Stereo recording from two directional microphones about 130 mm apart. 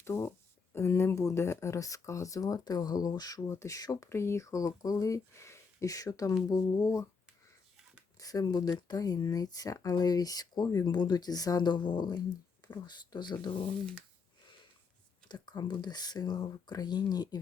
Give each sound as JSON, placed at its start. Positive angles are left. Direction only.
{"t": 0.0, "sound": "speech", "side_deg": 20}
{"t": 8.2, "sound": "speech", "side_deg": 30}
{"t": 15.3, "sound": "speech", "side_deg": 35}